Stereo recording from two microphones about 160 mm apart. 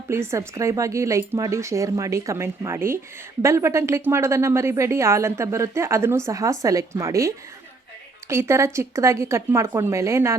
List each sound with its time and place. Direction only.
0.1 s speech: 15° right (ahead or behind)